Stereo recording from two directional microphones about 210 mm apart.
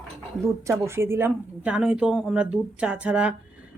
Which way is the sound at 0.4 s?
15° right (ahead or behind).